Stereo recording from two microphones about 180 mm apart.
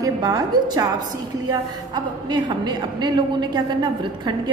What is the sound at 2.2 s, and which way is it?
A woman's voice, 25° right (ahead or behind).